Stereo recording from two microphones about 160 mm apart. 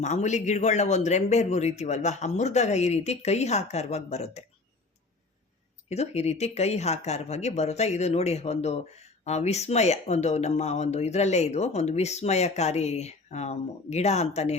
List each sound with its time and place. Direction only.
0.0 s speech: 45° left (ahead or behind)
5.9 s speech: 40° left (ahead or behind)